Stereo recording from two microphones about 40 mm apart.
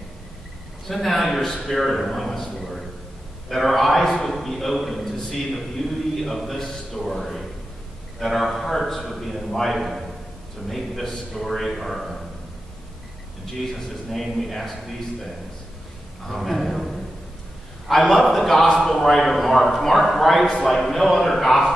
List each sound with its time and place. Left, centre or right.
0.8 s a man's voice: centre
13.7 s a man's voice: centre
16.3 s a man's voice: centre
20.4 s a man's voice: centre
20.7 s a man's voice: centre